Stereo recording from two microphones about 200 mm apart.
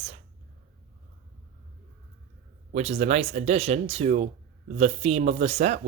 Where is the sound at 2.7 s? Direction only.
35° right (ahead or behind).